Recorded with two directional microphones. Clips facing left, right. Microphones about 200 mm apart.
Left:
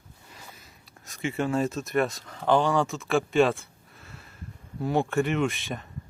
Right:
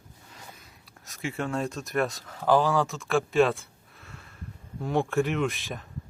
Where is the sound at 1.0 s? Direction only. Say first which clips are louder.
Left 4 dB; centre (ahead or behind).